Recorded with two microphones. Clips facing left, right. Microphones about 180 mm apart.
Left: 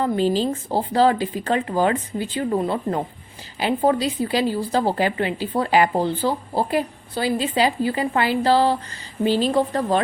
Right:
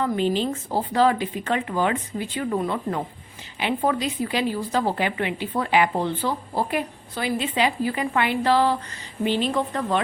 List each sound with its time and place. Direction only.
0.0 s a woman's voice: 35° left (ahead or behind)